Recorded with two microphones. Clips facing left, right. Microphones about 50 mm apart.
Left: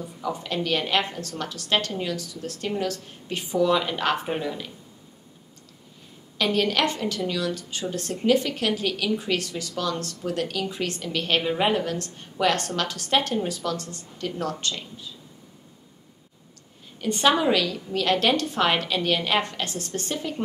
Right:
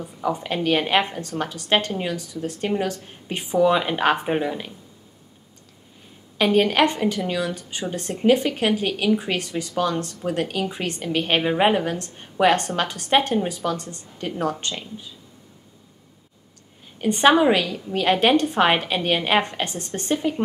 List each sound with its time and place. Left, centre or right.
0.0 s a woman's voice: right
6.3 s a woman's voice: right
17.0 s a woman's voice: right